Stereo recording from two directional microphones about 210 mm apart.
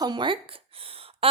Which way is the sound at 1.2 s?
25° right (ahead or behind).